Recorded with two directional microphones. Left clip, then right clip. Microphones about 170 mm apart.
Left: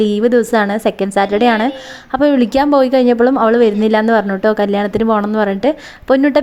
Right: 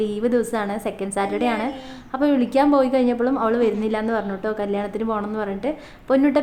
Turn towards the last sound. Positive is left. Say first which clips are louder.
# left 7 dB
turn(degrees=45)  # may be behind; listen again after turning